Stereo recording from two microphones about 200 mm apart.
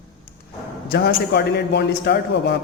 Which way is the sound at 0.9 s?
50° left (ahead or behind).